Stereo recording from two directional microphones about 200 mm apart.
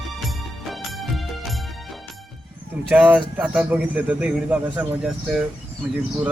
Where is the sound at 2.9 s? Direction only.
5° right (ahead or behind).